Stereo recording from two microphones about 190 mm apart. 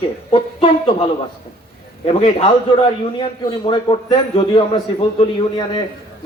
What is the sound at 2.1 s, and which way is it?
Speech, 40° left (ahead or behind).